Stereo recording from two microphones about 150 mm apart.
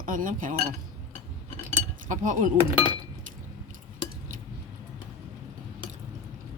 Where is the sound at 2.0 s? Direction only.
60° right (ahead or behind).